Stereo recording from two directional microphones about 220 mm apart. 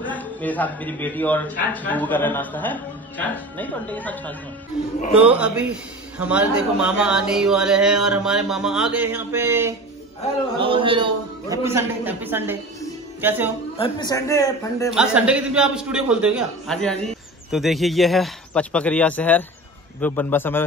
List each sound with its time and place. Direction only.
0.0 s a man's voice: 5° left (ahead or behind)
5.2 s a man's voice: 5° right (ahead or behind)
10.6 s a man's voice: 25° right (ahead or behind)
13.7 s a man's voice: 20° left (ahead or behind)
14.9 s a man's voice: 5° right (ahead or behind)